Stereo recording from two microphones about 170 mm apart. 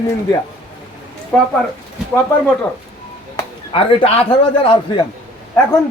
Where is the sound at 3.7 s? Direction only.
30° left (ahead or behind).